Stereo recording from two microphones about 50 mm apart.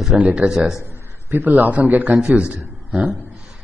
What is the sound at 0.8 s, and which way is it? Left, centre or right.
A man's voice, right.